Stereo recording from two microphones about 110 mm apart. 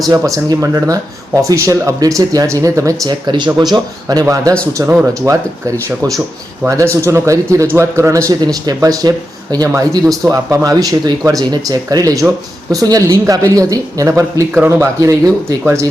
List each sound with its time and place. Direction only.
0.0 s speech: 35° right (ahead or behind)
6.7 s speech: 25° right (ahead or behind)